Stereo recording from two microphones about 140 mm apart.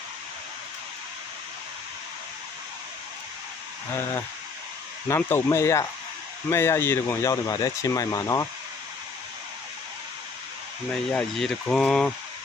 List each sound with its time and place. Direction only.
5.0 s speech: 20° left (ahead or behind)
10.9 s speech: 5° left (ahead or behind)